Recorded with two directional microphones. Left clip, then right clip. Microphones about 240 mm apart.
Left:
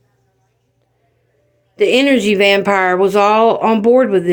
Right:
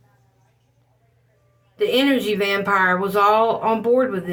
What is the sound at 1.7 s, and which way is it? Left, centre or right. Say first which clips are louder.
Speech: left 6 dB; left.